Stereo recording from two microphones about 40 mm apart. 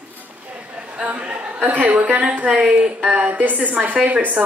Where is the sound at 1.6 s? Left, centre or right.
Right.